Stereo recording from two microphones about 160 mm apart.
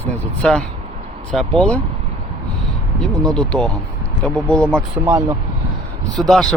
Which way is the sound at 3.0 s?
5° left (ahead or behind).